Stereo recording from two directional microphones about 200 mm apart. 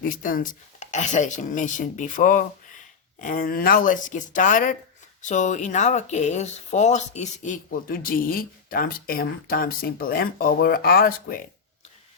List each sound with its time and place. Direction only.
0.2 s speech: 45° left (ahead or behind)